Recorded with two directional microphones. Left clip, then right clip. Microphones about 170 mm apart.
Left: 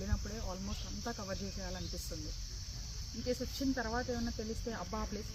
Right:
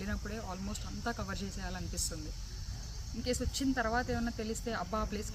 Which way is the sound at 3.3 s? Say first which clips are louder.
Right 2 dB; 30° right (ahead or behind).